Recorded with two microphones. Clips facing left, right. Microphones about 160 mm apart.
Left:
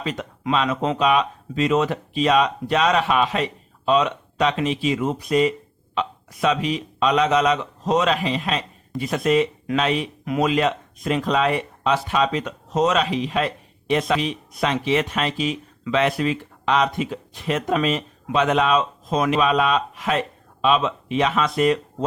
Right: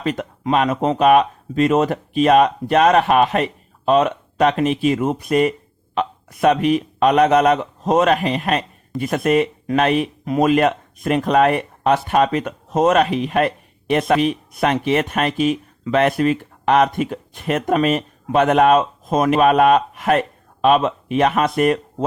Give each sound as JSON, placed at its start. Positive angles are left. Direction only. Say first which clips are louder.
{"t": 0.0, "sound": "speech", "louder": "right 5 dB", "side_deg": -55}
{"t": 10.2, "sound": "speech", "louder": "right 3 dB", "side_deg": -40}
{"t": 10.5, "sound": "speech", "louder": "right 5 dB", "side_deg": -55}